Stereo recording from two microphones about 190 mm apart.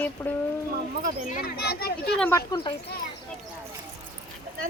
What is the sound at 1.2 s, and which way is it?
Speech, 45° left (ahead or behind).